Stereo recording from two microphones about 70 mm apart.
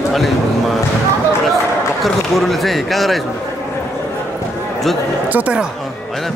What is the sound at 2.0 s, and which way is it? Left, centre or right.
A man's voice, centre.